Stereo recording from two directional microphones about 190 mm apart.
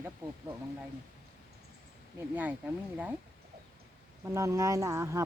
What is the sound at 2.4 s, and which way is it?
Speech, 10° right (ahead or behind).